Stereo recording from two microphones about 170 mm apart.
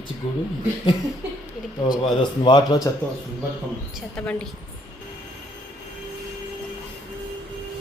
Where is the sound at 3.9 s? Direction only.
5° left (ahead or behind).